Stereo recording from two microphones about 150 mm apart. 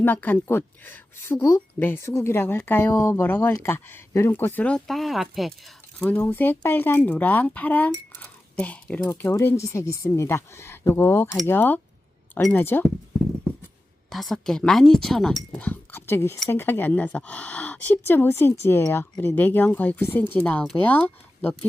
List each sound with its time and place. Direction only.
0.0 s speech: 10° left (ahead or behind)
6.0 s speech: 10° left (ahead or behind)
14.1 s speech: centre (ahead or behind)